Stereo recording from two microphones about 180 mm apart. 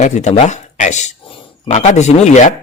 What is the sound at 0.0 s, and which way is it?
A man's voice, 40° left (ahead or behind).